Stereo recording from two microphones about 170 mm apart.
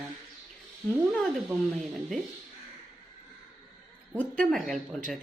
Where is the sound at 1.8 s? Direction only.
Centre (ahead or behind).